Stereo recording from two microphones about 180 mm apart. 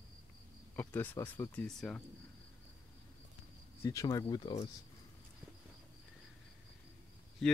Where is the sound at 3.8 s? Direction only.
15° left (ahead or behind).